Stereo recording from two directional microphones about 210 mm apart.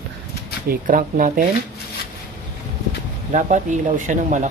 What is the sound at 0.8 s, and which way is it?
Speech, 40° right (ahead or behind).